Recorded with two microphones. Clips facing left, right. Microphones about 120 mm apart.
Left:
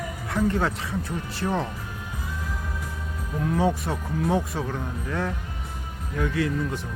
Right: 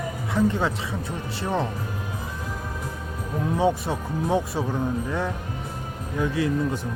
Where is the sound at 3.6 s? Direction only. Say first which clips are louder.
Right 3 dB; 25° right (ahead or behind).